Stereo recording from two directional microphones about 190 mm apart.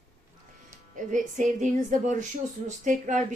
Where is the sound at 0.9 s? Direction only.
40° right (ahead or behind).